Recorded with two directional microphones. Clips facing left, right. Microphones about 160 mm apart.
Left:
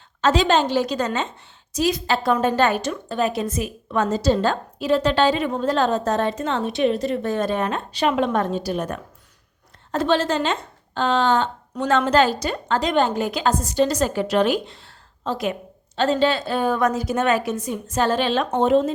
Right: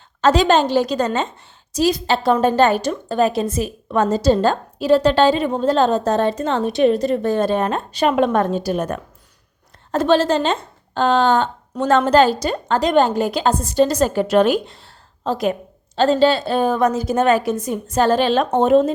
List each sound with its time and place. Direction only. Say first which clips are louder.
0.2 s a woman's voice: right 4 dB; 40° right (ahead or behind)
11.0 s a sound: right 4 dB; 45° right (ahead or behind)
12.2 s a woman's voice: right 4 dB; 35° right (ahead or behind)